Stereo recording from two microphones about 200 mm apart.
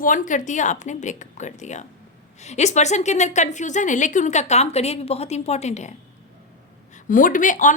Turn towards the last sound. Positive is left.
turn(degrees=40)  # may be behind; listen again after turning